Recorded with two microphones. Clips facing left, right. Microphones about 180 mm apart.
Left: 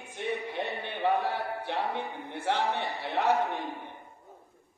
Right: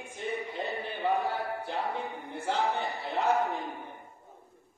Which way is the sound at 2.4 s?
65° left (ahead or behind).